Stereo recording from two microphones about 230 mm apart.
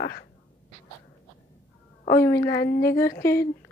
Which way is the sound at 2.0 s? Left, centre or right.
Centre.